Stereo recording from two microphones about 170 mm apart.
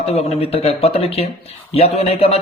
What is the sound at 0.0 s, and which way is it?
Speech, 35° left (ahead or behind).